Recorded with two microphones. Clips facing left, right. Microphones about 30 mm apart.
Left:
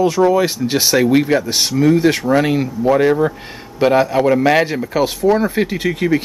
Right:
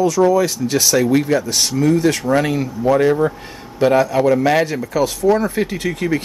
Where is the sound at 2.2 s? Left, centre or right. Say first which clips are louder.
Left 2 dB; centre.